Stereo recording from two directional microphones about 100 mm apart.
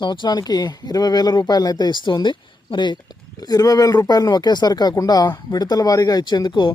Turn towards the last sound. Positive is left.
turn(degrees=50)  # may be behind; listen again after turning